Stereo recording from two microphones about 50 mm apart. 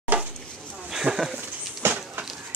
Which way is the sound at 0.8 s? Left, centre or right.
Centre.